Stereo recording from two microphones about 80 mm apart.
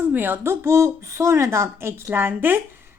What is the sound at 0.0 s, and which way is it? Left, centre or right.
A woman's voice, right.